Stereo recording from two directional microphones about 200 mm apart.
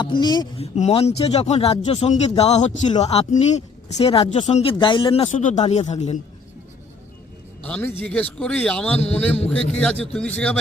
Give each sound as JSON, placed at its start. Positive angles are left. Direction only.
{"t": 0.0, "sound": "speech", "side_deg": 20}
{"t": 0.8, "sound": "speech", "side_deg": 30}
{"t": 7.6, "sound": "a man's voice", "side_deg": 5}